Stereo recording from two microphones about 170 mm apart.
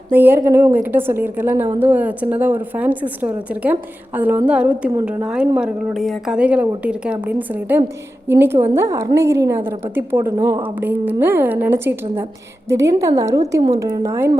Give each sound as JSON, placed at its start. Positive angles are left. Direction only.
{"t": 0.1, "sound": "a woman's voice", "side_deg": -10}